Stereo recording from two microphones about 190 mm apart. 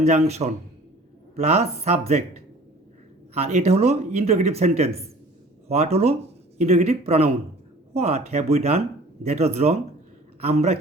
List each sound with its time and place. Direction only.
0.0 s speech: 35° right (ahead or behind)
3.3 s speech: 35° right (ahead or behind)